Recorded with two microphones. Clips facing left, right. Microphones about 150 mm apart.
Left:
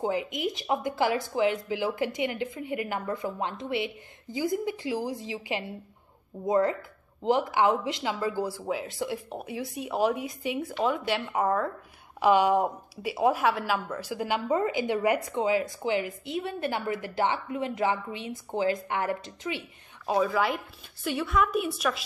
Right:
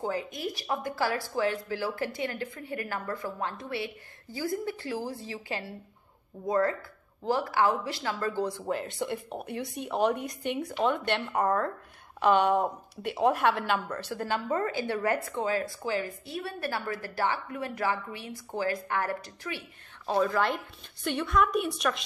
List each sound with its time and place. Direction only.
0.0 s a woman's voice: 20° left (ahead or behind)
20.1 s speech: 5° left (ahead or behind)